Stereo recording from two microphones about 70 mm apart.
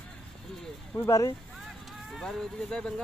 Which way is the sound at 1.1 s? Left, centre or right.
Left.